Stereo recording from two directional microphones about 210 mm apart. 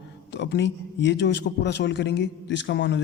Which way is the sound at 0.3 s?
55° left (ahead or behind).